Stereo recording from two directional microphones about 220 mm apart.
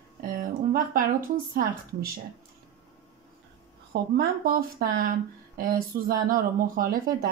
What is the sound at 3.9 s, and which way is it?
Speech, 45° right (ahead or behind).